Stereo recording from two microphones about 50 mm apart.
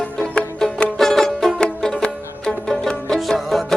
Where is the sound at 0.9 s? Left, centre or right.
Centre.